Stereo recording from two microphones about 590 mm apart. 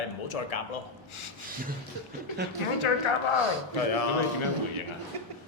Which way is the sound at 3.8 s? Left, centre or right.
Left.